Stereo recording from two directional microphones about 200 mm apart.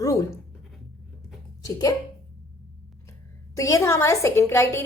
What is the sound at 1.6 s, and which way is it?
Speech, 15° left (ahead or behind).